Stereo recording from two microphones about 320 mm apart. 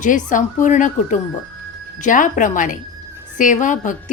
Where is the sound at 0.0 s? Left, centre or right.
Left.